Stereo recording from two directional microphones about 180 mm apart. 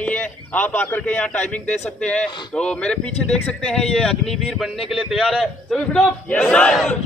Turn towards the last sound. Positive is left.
turn(degrees=5)  # may be behind; listen again after turning